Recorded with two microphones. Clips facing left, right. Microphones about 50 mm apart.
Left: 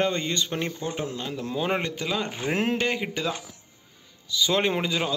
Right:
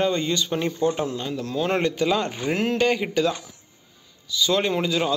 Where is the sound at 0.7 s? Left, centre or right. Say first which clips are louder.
Right 7 dB; centre.